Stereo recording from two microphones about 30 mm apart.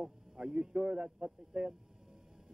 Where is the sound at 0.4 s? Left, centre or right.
Right.